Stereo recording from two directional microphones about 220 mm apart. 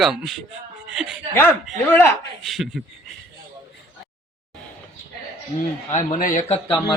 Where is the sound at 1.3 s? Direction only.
10° left (ahead or behind).